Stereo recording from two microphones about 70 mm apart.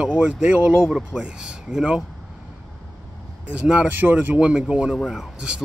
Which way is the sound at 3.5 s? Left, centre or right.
Centre.